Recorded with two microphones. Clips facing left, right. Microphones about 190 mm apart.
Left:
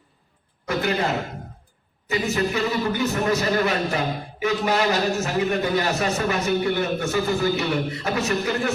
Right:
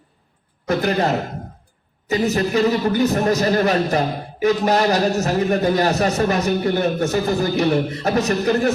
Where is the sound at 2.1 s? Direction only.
40° right (ahead or behind).